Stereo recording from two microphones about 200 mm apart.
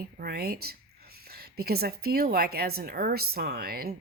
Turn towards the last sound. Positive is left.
turn(degrees=-50)  # may be behind; listen again after turning